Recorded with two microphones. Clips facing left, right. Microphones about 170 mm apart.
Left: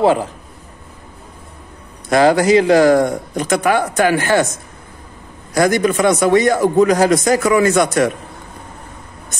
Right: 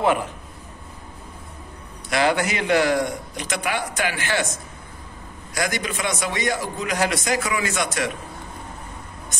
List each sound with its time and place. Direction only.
0.0 s a man's voice: 30° left (ahead or behind)
2.0 s a man's voice: 40° left (ahead or behind)
5.5 s a man's voice: 50° left (ahead or behind)